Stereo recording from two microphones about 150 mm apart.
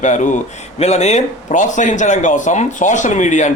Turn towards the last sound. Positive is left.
turn(degrees=55)  # may be behind; listen again after turning